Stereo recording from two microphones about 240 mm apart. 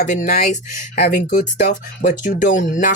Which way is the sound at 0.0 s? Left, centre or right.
Left.